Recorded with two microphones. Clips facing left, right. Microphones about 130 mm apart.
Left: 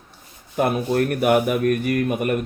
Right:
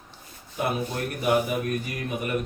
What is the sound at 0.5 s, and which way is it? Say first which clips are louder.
A man's voice: left 8 dB; 60° left (ahead or behind).